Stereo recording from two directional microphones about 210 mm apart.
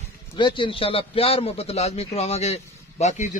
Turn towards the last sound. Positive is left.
turn(degrees=35)  # may be behind; listen again after turning